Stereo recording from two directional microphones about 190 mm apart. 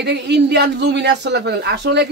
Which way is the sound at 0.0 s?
65° right (ahead or behind).